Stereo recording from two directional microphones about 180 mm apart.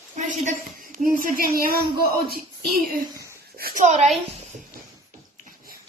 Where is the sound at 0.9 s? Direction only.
50° right (ahead or behind).